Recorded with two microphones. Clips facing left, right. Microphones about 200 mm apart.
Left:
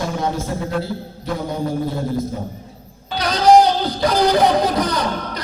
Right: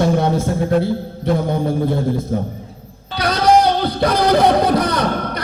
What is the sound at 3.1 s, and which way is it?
Music, 60° right (ahead or behind).